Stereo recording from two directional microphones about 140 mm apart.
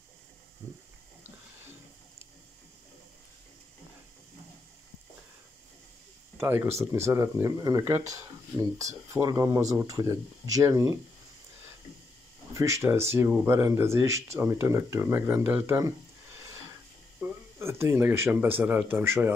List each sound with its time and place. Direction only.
0.6 s a sound: 20° right (ahead or behind)
6.3 s speech: 15° right (ahead or behind)
12.5 s speech: 20° right (ahead or behind)
17.2 s speech: 20° right (ahead or behind)